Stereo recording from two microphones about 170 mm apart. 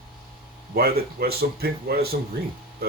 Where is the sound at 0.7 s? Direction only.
65° right (ahead or behind).